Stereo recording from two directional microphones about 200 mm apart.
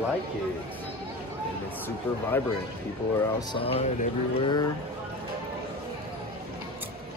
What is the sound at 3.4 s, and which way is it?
Speech, 25° left (ahead or behind).